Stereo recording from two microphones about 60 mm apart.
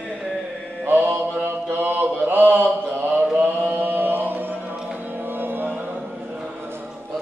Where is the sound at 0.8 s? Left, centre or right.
Right.